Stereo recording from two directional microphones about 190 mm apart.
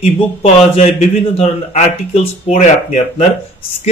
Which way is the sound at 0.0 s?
30° left (ahead or behind).